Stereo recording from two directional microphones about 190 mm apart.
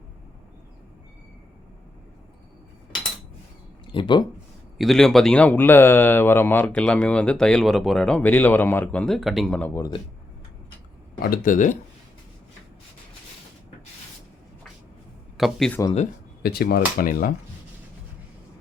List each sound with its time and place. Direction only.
3.9 s speech: 25° left (ahead or behind)
4.8 s speech: centre (ahead or behind)
11.2 s speech: 45° left (ahead or behind)
15.4 s speech: centre (ahead or behind)
16.4 s speech: 55° left (ahead or behind)